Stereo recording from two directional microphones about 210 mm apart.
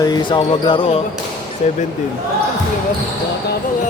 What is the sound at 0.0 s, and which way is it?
Speech, 20° left (ahead or behind).